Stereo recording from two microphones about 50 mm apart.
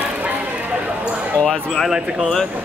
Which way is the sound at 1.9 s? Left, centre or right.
Centre.